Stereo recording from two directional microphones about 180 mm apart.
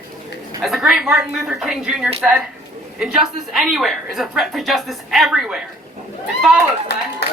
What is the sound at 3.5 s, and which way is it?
A woman's voice, centre (ahead or behind).